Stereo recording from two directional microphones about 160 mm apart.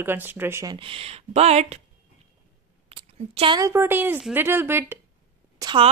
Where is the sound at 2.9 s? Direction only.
35° right (ahead or behind).